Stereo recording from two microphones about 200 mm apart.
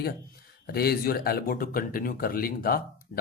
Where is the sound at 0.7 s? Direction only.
50° left (ahead or behind).